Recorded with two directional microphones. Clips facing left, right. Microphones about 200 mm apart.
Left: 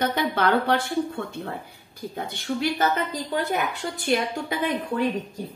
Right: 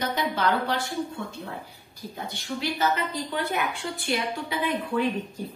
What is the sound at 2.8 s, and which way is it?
A woman's voice, 40° left (ahead or behind).